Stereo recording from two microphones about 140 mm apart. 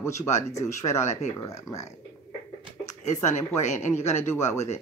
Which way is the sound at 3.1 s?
55° left (ahead or behind).